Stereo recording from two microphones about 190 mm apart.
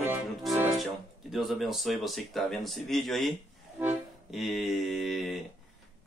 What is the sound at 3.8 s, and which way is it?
Music, 5° right (ahead or behind).